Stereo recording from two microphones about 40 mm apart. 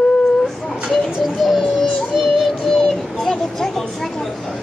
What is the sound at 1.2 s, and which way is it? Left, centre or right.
Music, centre.